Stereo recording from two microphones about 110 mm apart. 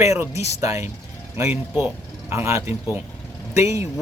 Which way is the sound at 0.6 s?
30° right (ahead or behind).